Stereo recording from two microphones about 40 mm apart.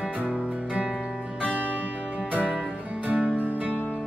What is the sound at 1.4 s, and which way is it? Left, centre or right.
Music, right.